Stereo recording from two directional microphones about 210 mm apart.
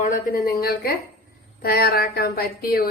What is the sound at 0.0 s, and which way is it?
A woman's voice, 40° left (ahead or behind).